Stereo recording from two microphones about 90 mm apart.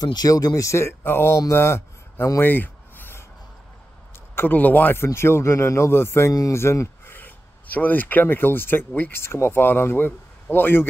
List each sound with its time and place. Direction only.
0.0 s speech: 45° left (ahead or behind); by 1.4 s 25° left (ahead or behind)
1.5 s a sound: 30° left (ahead or behind)
4.4 s a man's voice: 20° left (ahead or behind)